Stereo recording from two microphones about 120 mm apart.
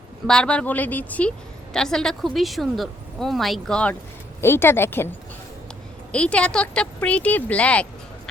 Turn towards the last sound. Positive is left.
turn(degrees=10)  # may be behind; listen again after turning